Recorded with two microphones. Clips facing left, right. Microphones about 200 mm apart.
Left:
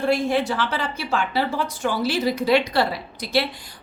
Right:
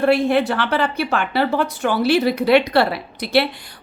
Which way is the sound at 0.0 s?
65° right (ahead or behind).